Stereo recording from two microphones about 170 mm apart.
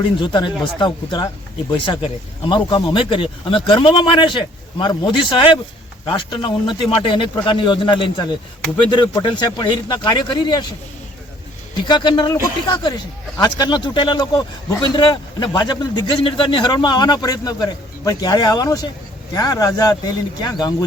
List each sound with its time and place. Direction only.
0.2 s a man's voice: 25° left (ahead or behind)
11.9 s a man's voice: 25° left (ahead or behind)